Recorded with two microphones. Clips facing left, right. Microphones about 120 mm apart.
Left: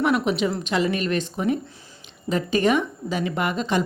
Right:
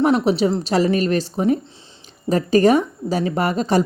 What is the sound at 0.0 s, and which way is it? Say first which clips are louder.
A woman's voice: right 5 dB; 35° right (ahead or behind).